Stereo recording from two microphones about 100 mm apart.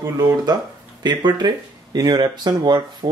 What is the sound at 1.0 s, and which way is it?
Speech, 45° right (ahead or behind).